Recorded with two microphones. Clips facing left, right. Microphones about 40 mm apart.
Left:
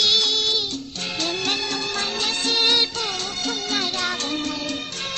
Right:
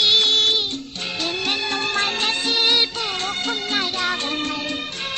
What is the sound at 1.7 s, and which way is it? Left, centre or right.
Music, right.